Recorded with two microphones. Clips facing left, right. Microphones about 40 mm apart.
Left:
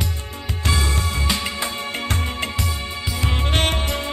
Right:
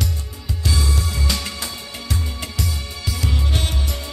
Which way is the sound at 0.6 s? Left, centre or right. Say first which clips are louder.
Left 2 dB; left.